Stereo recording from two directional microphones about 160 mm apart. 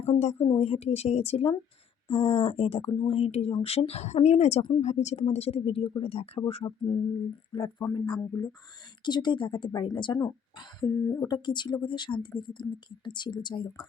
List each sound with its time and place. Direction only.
0.0 s speech: 45° left (ahead or behind)
6.7 s speech: 25° left (ahead or behind)
11.3 s speech: 30° left (ahead or behind)